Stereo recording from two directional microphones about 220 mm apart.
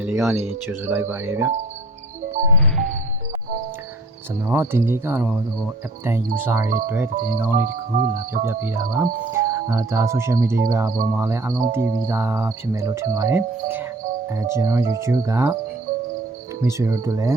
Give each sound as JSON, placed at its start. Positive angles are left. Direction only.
{"t": 0.0, "sound": "cricket", "side_deg": -5}
{"t": 4.4, "sound": "cricket", "side_deg": -10}
{"t": 7.5, "sound": "speech", "side_deg": -40}
{"t": 8.4, "sound": "cricket", "side_deg": -10}
{"t": 16.6, "sound": "cricket", "side_deg": -15}